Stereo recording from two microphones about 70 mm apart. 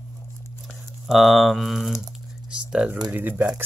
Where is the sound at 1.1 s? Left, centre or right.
Centre.